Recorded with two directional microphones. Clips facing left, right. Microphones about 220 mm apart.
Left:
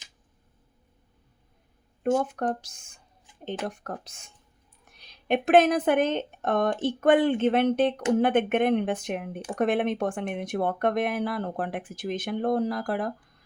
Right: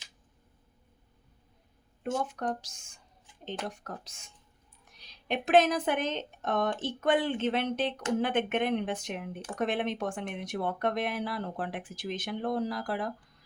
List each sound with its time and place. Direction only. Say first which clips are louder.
2.0 s speech: left 7 dB; 50° left (ahead or behind)